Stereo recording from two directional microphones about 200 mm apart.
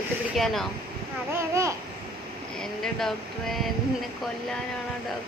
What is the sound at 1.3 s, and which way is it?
Speech, 15° right (ahead or behind).